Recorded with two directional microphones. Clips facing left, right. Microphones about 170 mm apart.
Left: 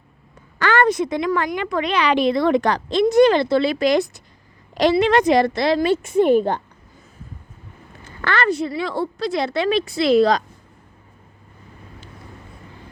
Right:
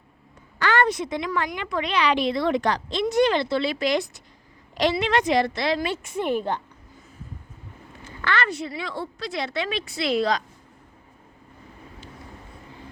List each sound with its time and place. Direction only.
0.6 s a woman's voice: 50° left (ahead or behind)
8.2 s a woman's voice: 40° left (ahead or behind)